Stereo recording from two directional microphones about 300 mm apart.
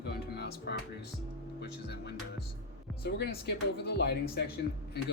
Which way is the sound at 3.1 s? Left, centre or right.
Left.